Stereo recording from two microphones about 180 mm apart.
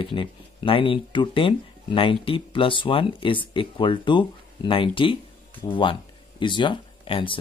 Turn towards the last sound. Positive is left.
turn(degrees=30)  # may be behind; listen again after turning